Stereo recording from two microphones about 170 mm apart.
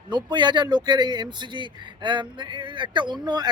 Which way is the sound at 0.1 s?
25° right (ahead or behind).